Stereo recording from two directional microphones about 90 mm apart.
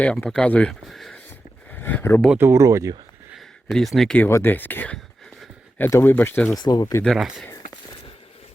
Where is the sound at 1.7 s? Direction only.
25° left (ahead or behind).